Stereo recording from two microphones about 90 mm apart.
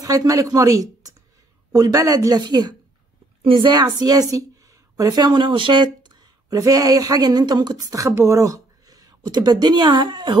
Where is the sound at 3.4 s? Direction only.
70° right (ahead or behind).